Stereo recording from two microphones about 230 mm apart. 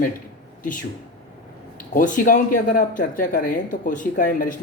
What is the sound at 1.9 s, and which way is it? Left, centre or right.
Speech, left.